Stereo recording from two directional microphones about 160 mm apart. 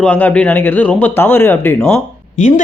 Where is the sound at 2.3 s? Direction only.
50° left (ahead or behind).